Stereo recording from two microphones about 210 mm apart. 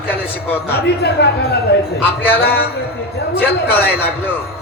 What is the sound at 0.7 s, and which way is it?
Speech, 55° left (ahead or behind).